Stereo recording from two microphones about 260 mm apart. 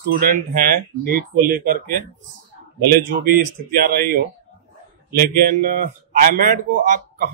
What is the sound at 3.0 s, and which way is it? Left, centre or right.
A man's voice, right.